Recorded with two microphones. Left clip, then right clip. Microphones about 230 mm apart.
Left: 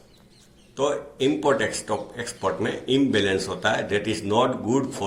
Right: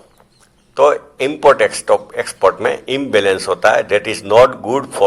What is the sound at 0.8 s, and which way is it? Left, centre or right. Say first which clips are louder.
Speech: right 12 dB; right.